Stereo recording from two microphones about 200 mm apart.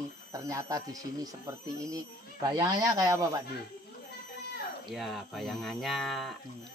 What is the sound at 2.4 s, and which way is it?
Speech, 15° right (ahead or behind).